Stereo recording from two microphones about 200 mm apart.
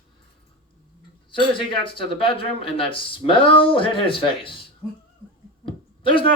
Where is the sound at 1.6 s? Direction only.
25° left (ahead or behind).